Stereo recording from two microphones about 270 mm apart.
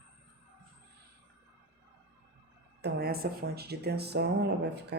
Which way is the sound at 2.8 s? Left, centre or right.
Right.